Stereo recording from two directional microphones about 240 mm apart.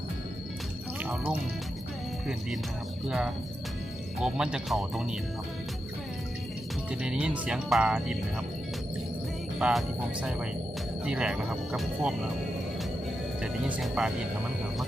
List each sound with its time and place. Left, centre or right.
1.0 s music: centre
3.1 s speech: centre
7.0 s speech: centre
9.6 s speech: centre
11.0 s speech: centre
13.4 s speech: centre